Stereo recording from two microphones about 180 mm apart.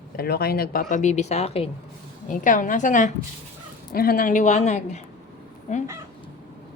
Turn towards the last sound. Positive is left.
turn(degrees=40)  # may be behind; listen again after turning